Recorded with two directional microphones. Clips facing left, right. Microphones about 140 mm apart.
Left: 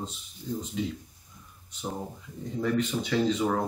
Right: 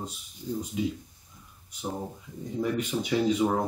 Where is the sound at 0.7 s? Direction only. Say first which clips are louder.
Right 3 dB; 15° right (ahead or behind).